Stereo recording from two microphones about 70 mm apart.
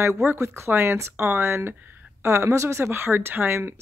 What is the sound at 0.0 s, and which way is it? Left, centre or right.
A woman's voice, right.